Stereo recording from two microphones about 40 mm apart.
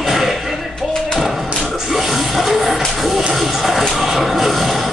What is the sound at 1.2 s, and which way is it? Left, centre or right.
Thump, centre.